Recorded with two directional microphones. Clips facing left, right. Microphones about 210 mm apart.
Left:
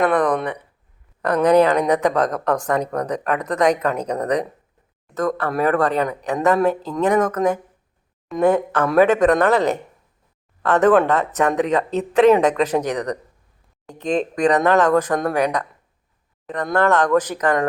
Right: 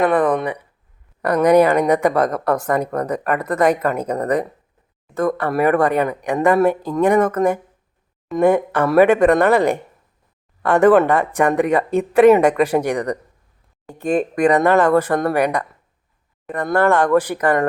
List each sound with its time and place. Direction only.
0.0 s speech: 5° right (ahead or behind)